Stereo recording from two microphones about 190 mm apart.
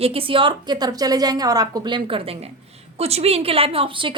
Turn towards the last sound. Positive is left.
turn(degrees=-25)  # may be behind; listen again after turning